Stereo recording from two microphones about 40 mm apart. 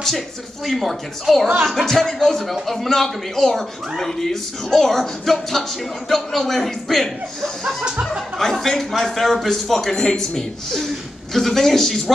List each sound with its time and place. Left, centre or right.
0.7 s a man's voice: centre
7.8 s music: centre
8.4 s speech: centre